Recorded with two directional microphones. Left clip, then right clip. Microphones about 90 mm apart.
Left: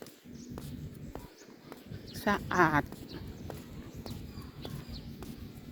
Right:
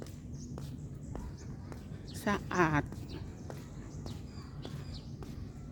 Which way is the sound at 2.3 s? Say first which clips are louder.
Left 4 dB; 35° right (ahead or behind).